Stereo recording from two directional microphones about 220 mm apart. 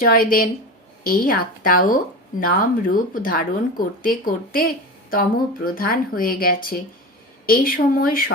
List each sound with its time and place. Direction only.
0.0 s speech: 40° left (ahead or behind)